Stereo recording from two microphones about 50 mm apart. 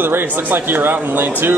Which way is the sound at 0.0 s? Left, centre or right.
Right.